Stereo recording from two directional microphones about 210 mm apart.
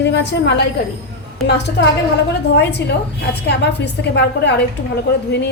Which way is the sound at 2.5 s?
55° left (ahead or behind).